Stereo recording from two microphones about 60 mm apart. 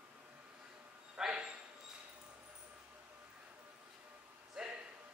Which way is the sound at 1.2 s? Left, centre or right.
Centre.